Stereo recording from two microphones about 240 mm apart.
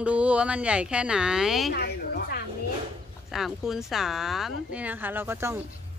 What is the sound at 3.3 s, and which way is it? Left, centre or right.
Speech, centre.